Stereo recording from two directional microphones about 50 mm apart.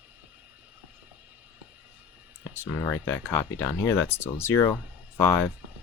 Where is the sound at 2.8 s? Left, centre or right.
Left.